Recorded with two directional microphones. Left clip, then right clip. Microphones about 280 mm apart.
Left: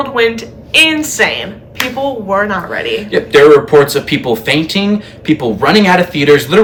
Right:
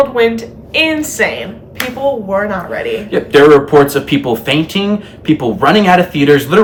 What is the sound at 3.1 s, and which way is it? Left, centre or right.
Speech, centre.